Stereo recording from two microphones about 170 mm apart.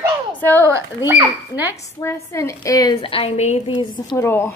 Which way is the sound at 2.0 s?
15° left (ahead or behind).